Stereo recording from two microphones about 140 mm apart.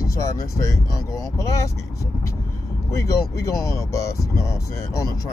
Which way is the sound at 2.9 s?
20° left (ahead or behind).